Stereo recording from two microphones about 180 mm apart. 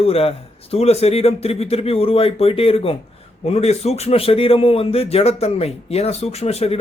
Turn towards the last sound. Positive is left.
turn(degrees=35)  # may be behind; listen again after turning